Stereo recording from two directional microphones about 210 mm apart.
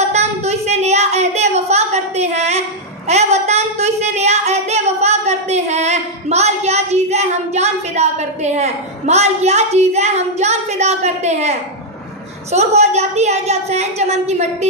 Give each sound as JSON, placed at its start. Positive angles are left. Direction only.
{"t": 0.1, "sound": "a sound", "side_deg": -30}
{"t": 3.1, "sound": "singing", "side_deg": -30}
{"t": 12.4, "sound": "a woman's voice", "side_deg": -30}